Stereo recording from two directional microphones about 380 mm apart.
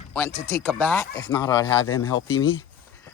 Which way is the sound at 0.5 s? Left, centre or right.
Centre.